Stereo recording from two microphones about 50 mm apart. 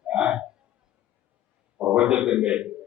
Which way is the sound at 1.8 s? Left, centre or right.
Right.